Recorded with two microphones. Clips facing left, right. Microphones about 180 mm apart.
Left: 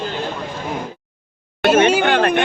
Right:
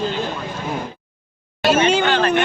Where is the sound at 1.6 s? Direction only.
55° left (ahead or behind).